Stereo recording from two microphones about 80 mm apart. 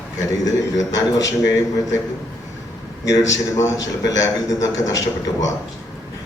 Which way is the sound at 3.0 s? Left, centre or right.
Left.